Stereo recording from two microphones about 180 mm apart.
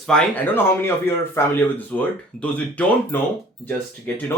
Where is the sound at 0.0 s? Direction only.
5° left (ahead or behind).